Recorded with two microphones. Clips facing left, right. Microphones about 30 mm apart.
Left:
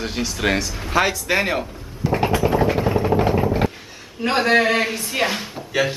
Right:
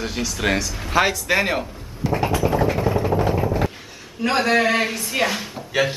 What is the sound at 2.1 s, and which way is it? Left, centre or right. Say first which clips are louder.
Vehicle: left 2 dB; centre.